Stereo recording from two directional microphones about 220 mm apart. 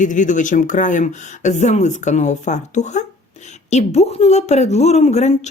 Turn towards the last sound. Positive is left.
turn(degrees=30)  # may be behind; listen again after turning